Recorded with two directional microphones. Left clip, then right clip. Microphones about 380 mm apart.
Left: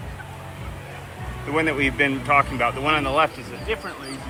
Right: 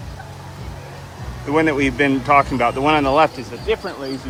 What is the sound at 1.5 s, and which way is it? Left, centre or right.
Speech, centre.